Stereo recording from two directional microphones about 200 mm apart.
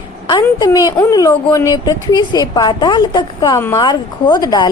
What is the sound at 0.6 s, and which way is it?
Speech, 20° left (ahead or behind).